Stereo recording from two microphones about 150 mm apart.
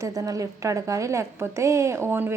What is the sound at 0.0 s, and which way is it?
A woman's voice, 25° right (ahead or behind).